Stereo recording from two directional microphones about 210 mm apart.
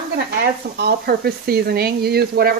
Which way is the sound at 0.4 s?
50° right (ahead or behind).